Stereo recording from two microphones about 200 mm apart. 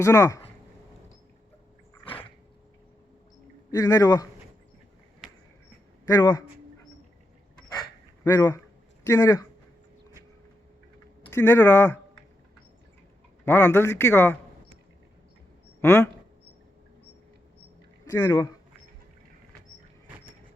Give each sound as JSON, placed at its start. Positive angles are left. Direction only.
{"t": 0.0, "sound": "a man's voice", "side_deg": 15}
{"t": 3.7, "sound": "a man's voice", "side_deg": 15}
{"t": 6.1, "sound": "a man's voice", "side_deg": 15}
{"t": 7.7, "sound": "dog", "side_deg": 15}
{"t": 9.0, "sound": "speech", "side_deg": 15}
{"t": 11.3, "sound": "speech", "side_deg": 10}
{"t": 13.4, "sound": "a man's voice", "side_deg": 10}
{"t": 15.8, "sound": "speech", "side_deg": 10}
{"t": 18.1, "sound": "a man's voice", "side_deg": 15}